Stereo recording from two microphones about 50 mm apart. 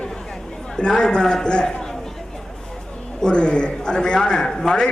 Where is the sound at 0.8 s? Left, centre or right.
Centre.